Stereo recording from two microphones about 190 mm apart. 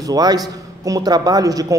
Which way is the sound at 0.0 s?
20° right (ahead or behind).